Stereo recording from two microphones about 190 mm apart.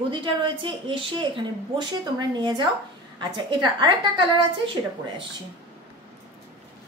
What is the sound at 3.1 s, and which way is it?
Speech, 25° right (ahead or behind).